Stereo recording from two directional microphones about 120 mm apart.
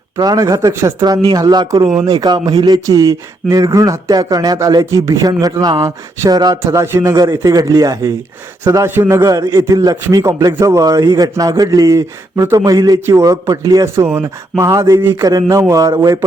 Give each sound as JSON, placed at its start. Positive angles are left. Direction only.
{"t": 0.2, "sound": "a man's voice", "side_deg": -30}
{"t": 1.0, "sound": "a man's voice", "side_deg": -35}